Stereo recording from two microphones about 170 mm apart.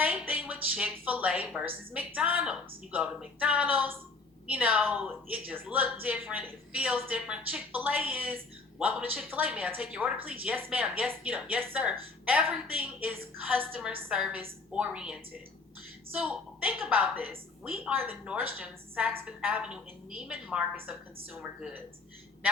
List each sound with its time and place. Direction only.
0.0 s a woman's voice: 10° right (ahead or behind)